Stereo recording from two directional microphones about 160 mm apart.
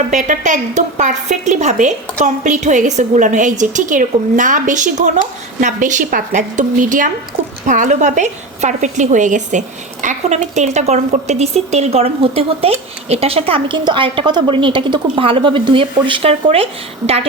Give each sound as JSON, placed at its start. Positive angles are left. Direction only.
{"t": 0.1, "sound": "a woman's voice", "side_deg": -50}